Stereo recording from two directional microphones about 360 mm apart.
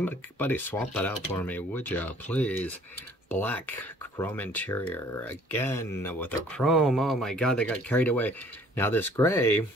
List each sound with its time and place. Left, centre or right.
0.0 s speech: centre